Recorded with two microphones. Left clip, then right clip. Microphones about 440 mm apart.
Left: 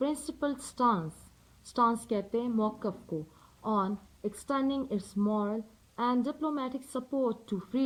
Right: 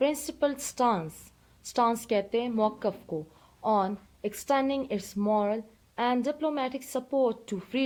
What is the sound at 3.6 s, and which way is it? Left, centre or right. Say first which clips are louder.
A woman's voice: right 5 dB; centre.